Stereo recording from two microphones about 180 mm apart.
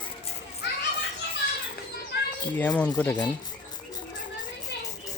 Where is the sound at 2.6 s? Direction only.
10° left (ahead or behind).